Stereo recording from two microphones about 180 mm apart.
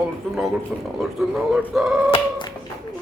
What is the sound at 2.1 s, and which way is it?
Cat, 25° left (ahead or behind).